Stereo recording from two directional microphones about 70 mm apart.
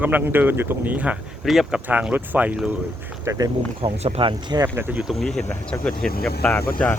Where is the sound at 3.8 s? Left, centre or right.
Right.